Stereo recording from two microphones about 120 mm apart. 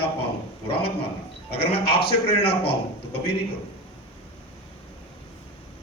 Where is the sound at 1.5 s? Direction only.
50° left (ahead or behind).